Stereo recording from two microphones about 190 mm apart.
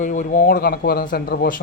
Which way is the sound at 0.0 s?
40° left (ahead or behind).